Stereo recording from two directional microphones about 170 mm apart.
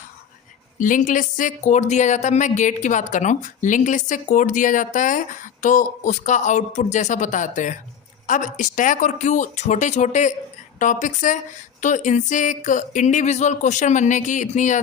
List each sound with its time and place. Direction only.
0.8 s speech: 50° left (ahead or behind)